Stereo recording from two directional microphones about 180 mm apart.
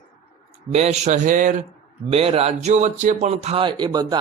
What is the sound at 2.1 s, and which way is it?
A man's voice, 35° right (ahead or behind).